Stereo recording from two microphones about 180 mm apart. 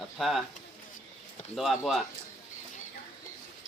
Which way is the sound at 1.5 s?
Centre (ahead or behind).